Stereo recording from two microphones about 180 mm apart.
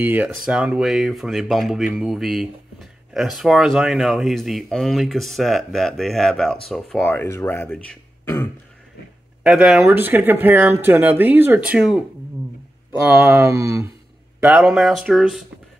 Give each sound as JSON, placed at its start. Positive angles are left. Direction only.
{"t": 0.0, "sound": "speech", "side_deg": -10}
{"t": 9.4, "sound": "speech", "side_deg": 0}
{"t": 13.0, "sound": "speech", "side_deg": -10}
{"t": 14.4, "sound": "speech", "side_deg": -5}